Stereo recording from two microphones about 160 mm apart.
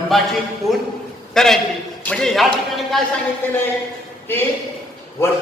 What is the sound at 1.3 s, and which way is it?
A man's voice, 5° left (ahead or behind).